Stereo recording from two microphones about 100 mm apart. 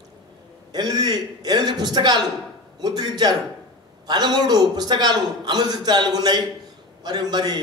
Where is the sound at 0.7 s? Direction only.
45° right (ahead or behind).